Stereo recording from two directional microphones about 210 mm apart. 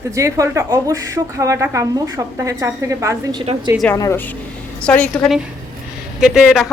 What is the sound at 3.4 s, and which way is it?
Speech, 25° right (ahead or behind).